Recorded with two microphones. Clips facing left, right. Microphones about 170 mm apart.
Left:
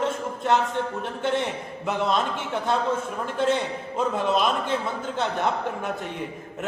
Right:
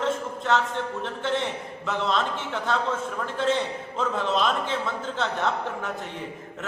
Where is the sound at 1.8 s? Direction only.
15° left (ahead or behind).